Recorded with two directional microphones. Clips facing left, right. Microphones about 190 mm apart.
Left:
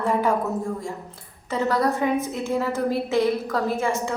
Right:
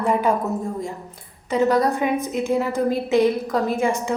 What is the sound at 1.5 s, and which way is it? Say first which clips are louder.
A woman's voice: right 4 dB; 15° right (ahead or behind).